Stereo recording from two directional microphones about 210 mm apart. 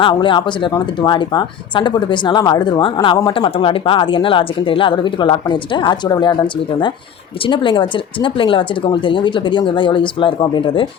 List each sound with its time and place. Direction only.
0.0 s speech: 25° left (ahead or behind)
7.4 s speech: 25° left (ahead or behind)